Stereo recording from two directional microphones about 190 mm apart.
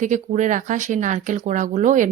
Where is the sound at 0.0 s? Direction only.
40° right (ahead or behind).